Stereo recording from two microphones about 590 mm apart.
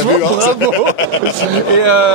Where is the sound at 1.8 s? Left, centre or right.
Right.